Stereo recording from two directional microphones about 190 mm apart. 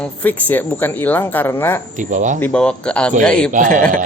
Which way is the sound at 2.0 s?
40° right (ahead or behind).